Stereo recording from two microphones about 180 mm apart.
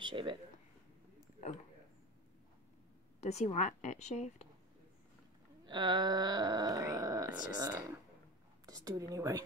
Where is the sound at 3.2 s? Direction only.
35° left (ahead or behind).